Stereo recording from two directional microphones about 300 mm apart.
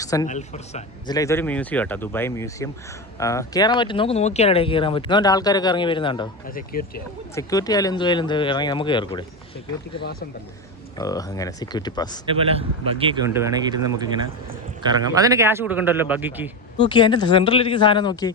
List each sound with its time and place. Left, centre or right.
0.0 s a sound: centre
0.3 s speech: left
6.5 s speech: left
7.3 s speech: centre
10.0 s speech: left
10.9 s speech: centre
12.2 s speech: centre
16.8 s speech: centre